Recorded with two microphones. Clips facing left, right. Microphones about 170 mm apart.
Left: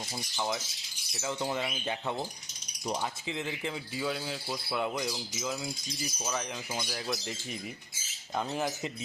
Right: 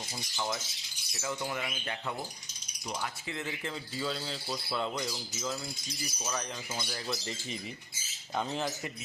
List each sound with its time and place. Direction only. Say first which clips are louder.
0.3 s speech: left 2 dB; 15° left (ahead or behind)
8.4 s speech: left 1 dB; 5° left (ahead or behind)